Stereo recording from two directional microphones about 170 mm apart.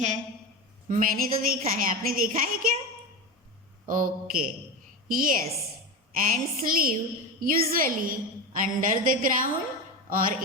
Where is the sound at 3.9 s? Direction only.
55° right (ahead or behind).